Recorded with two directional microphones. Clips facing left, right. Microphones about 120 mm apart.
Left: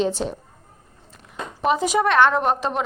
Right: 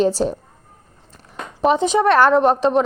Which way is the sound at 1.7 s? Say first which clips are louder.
Right 4 dB; 30° right (ahead or behind).